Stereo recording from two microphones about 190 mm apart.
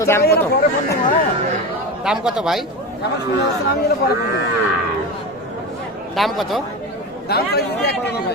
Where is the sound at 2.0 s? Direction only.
5° right (ahead or behind).